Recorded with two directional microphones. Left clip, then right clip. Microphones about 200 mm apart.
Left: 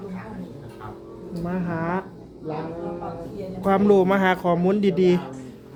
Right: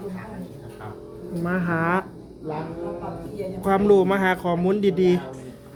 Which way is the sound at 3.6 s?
10° left (ahead or behind).